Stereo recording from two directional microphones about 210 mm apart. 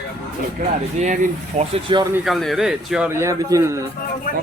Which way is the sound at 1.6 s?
25° right (ahead or behind).